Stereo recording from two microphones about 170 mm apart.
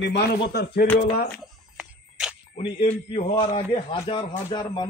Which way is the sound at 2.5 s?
35° left (ahead or behind).